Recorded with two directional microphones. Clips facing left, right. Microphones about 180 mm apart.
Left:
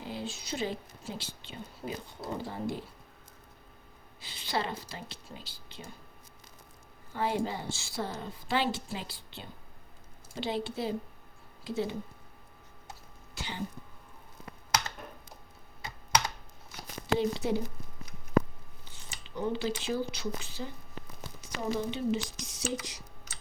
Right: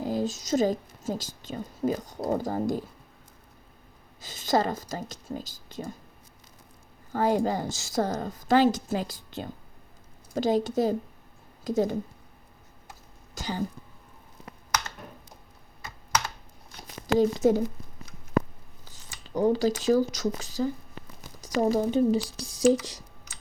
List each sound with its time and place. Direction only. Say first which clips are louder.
0.0 s a woman's voice: right 10 dB; 40° right (ahead or behind)
4.2 s a woman's voice: right 9 dB; 45° right (ahead or behind)
7.1 s a woman's voice: right 7 dB; 45° right (ahead or behind)
13.3 s speech: right 8 dB; 40° right (ahead or behind)
17.2 s a woman's voice: right 10 dB; 45° right (ahead or behind)
19.4 s speech: right 9 dB; 40° right (ahead or behind)